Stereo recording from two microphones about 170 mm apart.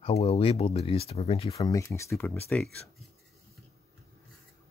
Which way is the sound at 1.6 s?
20° left (ahead or behind).